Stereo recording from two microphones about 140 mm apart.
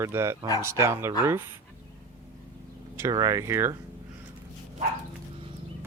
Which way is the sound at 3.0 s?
25° right (ahead or behind).